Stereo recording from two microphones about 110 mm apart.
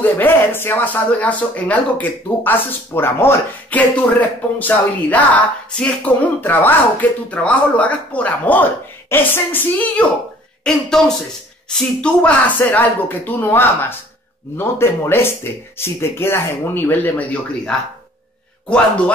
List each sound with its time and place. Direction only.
0.0 s a woman's voice: 20° left (ahead or behind)